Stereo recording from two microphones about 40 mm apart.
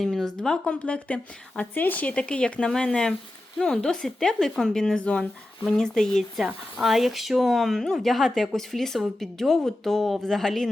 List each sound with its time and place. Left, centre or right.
0.0 s speech: centre; by 1.6 s left
1.7 s speech: left
2.1 s speech: left; by 4.8 s centre
4.9 s speech: left
5.6 s speech: centre
6.8 s speech: centre